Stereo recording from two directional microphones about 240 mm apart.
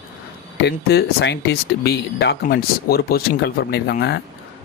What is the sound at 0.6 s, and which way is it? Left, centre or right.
Speech, left.